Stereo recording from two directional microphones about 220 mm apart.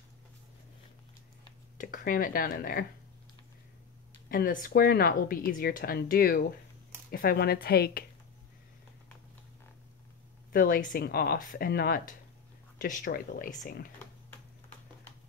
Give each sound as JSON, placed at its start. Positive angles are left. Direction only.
{"t": 1.8, "sound": "speech", "side_deg": 40}
{"t": 4.3, "sound": "speech", "side_deg": 40}
{"t": 10.5, "sound": "speech", "side_deg": 40}